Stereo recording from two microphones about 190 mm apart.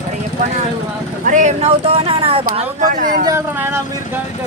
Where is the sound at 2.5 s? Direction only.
45° right (ahead or behind).